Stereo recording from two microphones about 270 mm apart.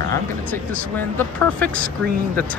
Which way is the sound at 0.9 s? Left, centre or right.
Centre.